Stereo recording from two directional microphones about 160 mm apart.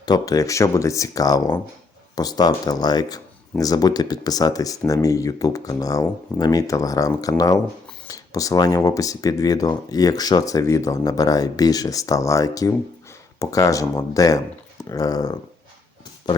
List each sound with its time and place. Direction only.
0.0 s speech: 25° left (ahead or behind)